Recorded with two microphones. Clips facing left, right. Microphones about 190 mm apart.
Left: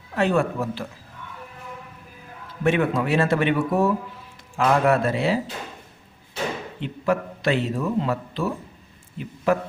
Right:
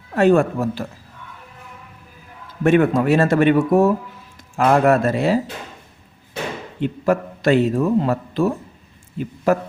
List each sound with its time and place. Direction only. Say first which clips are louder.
0.1 s a man's voice: right 7 dB; 45° right (ahead or behind)
2.6 s a man's voice: right 6 dB; 45° right (ahead or behind)
6.7 s a man's voice: right 6 dB; 45° right (ahead or behind)